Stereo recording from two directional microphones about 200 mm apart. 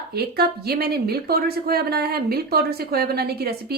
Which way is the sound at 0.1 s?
50° right (ahead or behind).